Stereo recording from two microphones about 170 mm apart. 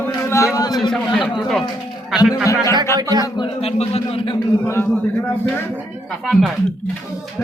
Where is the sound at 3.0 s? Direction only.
20° right (ahead or behind).